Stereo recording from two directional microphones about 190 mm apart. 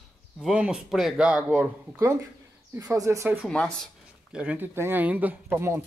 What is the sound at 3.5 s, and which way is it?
Speech, 5° left (ahead or behind).